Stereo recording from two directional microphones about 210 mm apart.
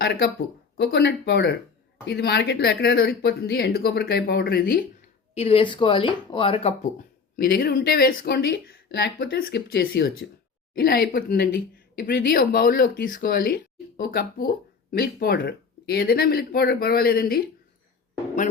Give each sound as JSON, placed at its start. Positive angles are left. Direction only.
{"t": 0.0, "sound": "speech", "side_deg": 50}
{"t": 5.3, "sound": "speech", "side_deg": 30}
{"t": 7.3, "sound": "speech", "side_deg": 45}